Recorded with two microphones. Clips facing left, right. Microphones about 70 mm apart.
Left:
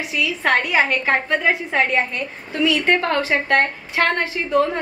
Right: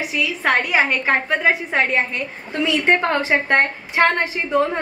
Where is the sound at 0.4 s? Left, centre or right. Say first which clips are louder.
Even; centre.